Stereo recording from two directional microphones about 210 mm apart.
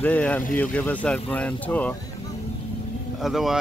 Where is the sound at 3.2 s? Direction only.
Centre (ahead or behind).